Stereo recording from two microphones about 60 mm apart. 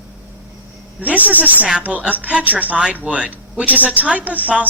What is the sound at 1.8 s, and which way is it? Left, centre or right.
Speech, right.